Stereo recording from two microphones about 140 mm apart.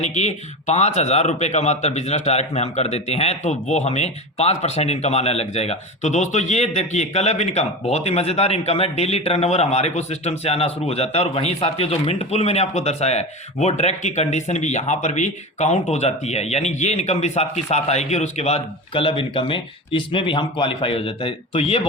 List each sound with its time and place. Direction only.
0.0 s speech: 55° left (ahead or behind)